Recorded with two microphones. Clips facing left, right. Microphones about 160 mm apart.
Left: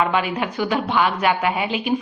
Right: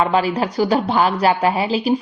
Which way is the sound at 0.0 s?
35° right (ahead or behind).